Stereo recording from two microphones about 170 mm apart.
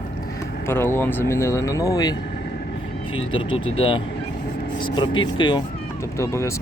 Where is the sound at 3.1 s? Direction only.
30° left (ahead or behind).